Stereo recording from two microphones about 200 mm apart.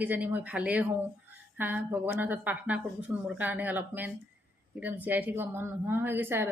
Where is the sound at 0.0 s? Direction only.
10° right (ahead or behind).